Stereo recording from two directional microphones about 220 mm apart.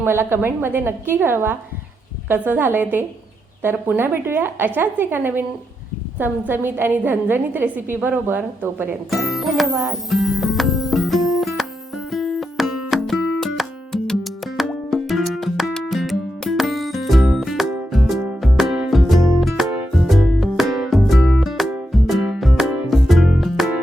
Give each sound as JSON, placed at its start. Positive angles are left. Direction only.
{"t": 0.0, "sound": "a woman's voice", "side_deg": -10}
{"t": 12.1, "sound": "music", "side_deg": 0}